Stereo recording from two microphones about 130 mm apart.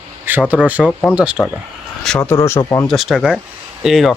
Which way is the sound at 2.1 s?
10° left (ahead or behind).